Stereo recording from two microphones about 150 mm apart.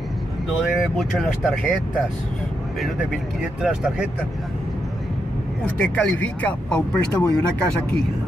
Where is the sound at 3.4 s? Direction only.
5° right (ahead or behind).